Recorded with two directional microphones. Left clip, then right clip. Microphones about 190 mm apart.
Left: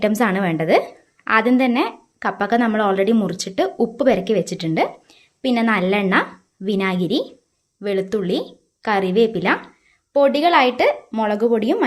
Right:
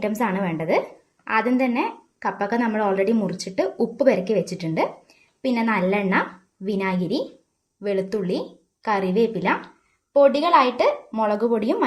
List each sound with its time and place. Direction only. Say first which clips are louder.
0.0 s a woman's voice: left 5 dB; 35° left (ahead or behind)